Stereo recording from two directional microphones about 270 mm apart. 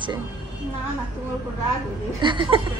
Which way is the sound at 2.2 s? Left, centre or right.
Centre.